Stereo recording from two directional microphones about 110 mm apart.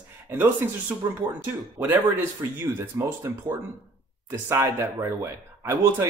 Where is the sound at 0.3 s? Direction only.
20° right (ahead or behind).